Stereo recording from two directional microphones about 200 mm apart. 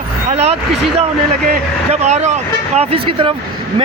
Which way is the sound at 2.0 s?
35° right (ahead or behind).